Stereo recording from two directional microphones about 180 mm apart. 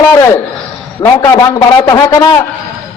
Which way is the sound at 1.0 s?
20° left (ahead or behind).